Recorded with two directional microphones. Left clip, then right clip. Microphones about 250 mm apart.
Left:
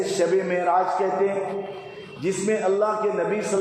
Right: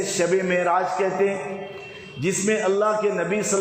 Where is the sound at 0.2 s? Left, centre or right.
Right.